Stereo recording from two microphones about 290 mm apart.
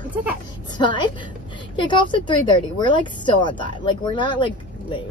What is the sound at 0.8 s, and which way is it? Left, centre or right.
Speech, centre.